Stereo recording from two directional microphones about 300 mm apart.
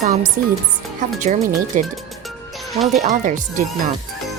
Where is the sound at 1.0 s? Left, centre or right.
Right.